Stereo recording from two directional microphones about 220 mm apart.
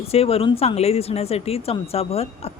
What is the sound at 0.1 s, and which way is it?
Speech, 25° left (ahead or behind).